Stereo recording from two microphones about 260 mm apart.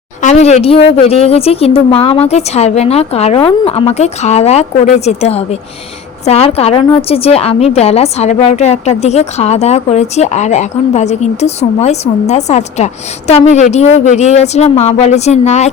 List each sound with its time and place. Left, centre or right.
0.2 s a woman's voice: left